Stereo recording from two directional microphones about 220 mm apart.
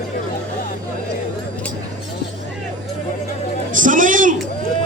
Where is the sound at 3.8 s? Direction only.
35° right (ahead or behind).